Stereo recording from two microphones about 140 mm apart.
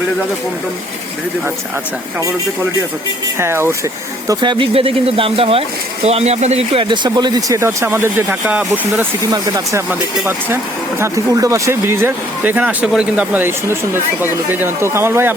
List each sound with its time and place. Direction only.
3.3 s speech: 20° right (ahead or behind)
4.3 s speech: 35° right (ahead or behind); by 15.4 s 15° right (ahead or behind)